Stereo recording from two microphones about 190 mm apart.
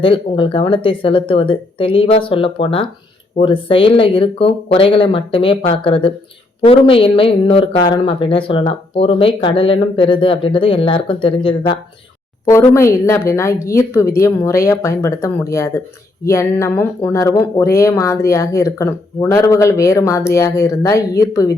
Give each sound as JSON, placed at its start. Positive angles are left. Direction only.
{"t": 0.0, "sound": "speech", "side_deg": 25}
{"t": 12.5, "sound": "speech", "side_deg": 15}